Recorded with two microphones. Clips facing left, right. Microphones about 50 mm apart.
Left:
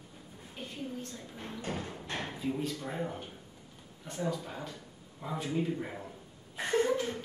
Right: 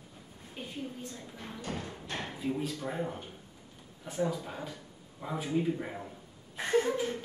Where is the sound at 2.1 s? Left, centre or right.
Centre.